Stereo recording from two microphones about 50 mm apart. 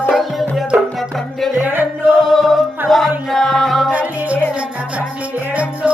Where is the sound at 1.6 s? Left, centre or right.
Right.